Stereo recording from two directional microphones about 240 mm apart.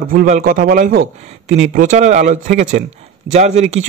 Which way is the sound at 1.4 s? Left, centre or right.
Right.